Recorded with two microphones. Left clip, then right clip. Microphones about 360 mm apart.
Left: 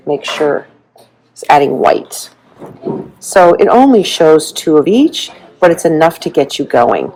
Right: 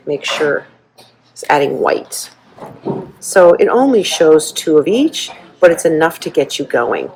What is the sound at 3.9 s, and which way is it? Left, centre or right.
Speech, centre.